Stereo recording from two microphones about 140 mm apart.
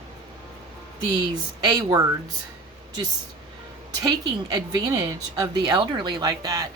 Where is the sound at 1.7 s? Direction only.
25° right (ahead or behind).